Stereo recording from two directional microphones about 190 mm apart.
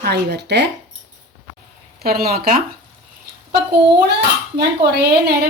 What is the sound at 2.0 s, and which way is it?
Speech, 55° right (ahead or behind).